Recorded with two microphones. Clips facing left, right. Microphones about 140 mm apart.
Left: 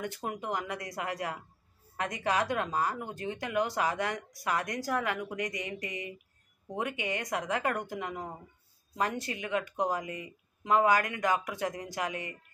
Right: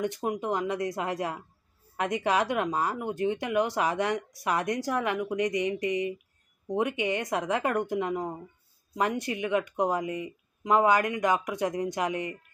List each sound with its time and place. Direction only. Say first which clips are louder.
0.0 s speech: right 6 dB; 20° right (ahead or behind)
9.3 s speech: right 5 dB; 20° right (ahead or behind)